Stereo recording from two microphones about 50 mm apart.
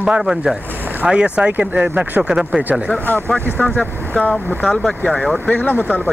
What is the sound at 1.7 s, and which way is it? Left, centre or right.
Speech, right.